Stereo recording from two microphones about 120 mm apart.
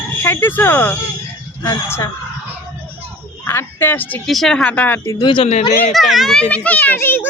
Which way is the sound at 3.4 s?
20° left (ahead or behind).